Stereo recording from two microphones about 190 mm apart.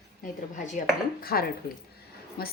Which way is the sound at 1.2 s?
50° left (ahead or behind).